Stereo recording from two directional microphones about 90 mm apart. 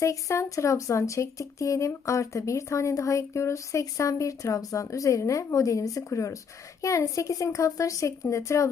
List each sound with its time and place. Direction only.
0.0 s speech: 35° left (ahead or behind)